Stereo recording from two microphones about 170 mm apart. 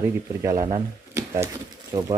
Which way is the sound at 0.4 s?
20° right (ahead or behind).